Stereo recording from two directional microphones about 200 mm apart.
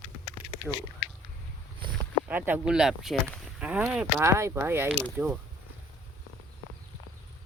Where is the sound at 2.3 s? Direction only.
10° right (ahead or behind).